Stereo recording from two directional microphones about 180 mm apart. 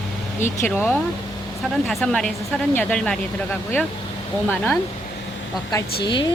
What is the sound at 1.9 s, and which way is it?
Speech, 5° left (ahead or behind).